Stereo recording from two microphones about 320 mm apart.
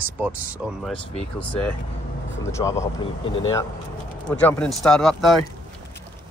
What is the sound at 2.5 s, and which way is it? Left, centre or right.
Speech, centre.